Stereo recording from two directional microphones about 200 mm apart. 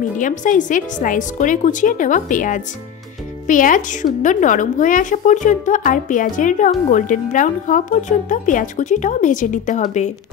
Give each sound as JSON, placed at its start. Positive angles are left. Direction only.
{"t": 0.2, "sound": "a woman's voice", "side_deg": 40}